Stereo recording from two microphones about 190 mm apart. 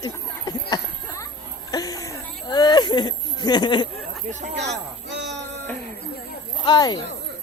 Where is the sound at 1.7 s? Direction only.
20° left (ahead or behind).